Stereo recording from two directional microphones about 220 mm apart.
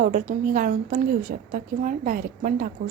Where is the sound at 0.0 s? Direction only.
40° right (ahead or behind).